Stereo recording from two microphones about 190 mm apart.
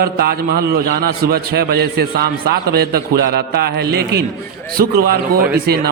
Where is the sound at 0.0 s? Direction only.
55° right (ahead or behind).